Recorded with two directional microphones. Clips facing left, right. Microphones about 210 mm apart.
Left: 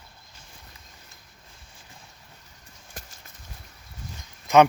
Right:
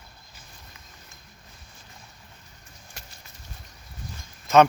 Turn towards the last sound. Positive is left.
turn(degrees=15)  # may be behind; listen again after turning